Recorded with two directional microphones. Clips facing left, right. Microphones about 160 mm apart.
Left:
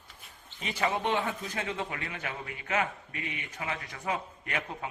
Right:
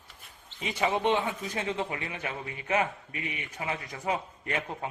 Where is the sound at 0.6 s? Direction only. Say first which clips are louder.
Right 3 dB; 15° right (ahead or behind).